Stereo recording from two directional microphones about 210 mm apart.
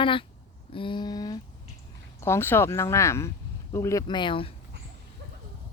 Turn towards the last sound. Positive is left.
turn(degrees=25)  # may be behind; listen again after turning